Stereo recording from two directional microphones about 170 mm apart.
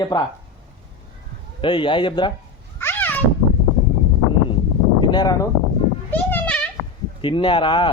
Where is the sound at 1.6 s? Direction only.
30° left (ahead or behind).